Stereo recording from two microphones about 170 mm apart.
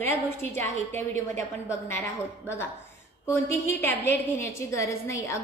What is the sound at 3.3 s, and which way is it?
A woman's voice, 15° left (ahead or behind).